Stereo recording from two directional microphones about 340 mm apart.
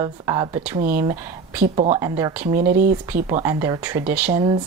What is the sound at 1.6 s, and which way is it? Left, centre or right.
Speech, centre.